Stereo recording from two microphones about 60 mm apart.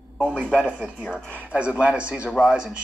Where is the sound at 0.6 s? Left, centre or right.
Right.